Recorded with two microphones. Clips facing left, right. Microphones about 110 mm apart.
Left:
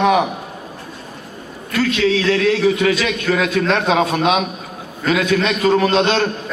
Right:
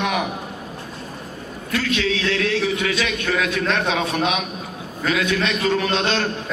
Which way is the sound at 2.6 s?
40° left (ahead or behind).